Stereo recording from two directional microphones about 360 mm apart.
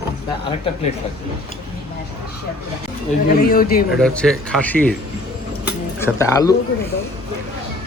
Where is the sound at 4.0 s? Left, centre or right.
Centre.